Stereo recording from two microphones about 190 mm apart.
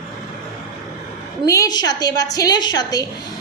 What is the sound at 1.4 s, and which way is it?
A woman's voice, 20° left (ahead or behind).